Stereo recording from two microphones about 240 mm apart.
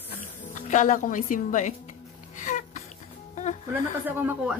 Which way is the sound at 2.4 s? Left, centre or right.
Left.